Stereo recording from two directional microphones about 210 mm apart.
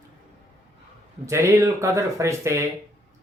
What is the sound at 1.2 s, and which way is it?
Speech, 15° right (ahead or behind).